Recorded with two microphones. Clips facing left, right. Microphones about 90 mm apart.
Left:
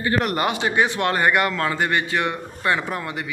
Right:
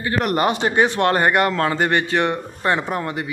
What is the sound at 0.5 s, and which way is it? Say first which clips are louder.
Speech: right 3 dB; 45° right (ahead or behind).